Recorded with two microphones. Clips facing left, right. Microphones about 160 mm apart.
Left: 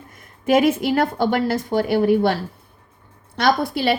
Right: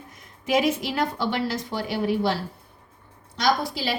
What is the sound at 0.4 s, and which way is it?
A woman's voice, 55° left (ahead or behind).